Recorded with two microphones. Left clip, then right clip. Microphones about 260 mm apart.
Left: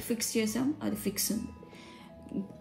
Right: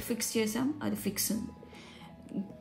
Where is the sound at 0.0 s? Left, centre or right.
Right.